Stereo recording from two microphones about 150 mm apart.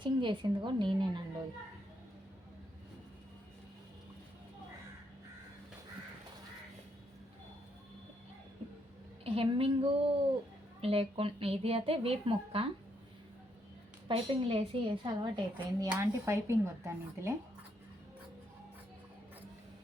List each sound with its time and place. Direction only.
0.0 s a woman's voice: 35° right (ahead or behind)
9.2 s a woman's voice: 40° right (ahead or behind)
14.1 s a woman's voice: 35° right (ahead or behind)
15.9 s speech: 15° right (ahead or behind)